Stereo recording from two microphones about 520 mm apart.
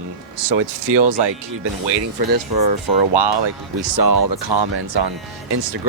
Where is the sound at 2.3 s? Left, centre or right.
Right.